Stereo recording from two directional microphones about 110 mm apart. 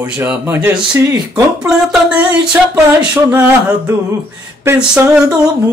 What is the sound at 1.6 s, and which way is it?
Speech, 10° right (ahead or behind).